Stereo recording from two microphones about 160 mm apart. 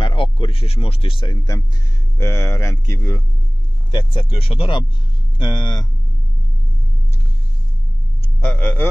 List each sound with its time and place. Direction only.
0.0 s a sound: 30° left (ahead or behind)
2.1 s speech: 15° left (ahead or behind)
3.9 s speech: 35° left (ahead or behind)
8.4 s speech: 10° left (ahead or behind)